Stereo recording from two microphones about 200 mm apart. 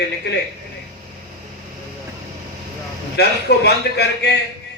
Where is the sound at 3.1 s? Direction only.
55° left (ahead or behind).